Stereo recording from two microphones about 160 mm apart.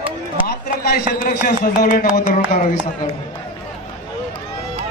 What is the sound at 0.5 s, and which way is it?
A man's voice, 80° left.